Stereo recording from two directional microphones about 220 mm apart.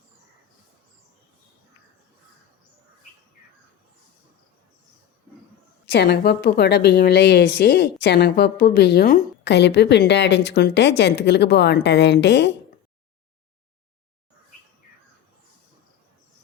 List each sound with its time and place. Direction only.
5.8 s a woman's voice: 50° left (ahead or behind)